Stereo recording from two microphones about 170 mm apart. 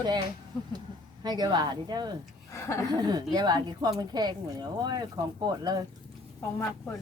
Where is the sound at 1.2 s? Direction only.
25° right (ahead or behind).